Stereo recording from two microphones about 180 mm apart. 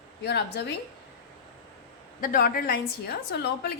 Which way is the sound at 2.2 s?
55° left (ahead or behind).